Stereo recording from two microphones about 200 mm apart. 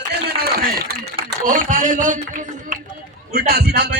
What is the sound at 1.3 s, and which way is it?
A man's voice, 40° right (ahead or behind).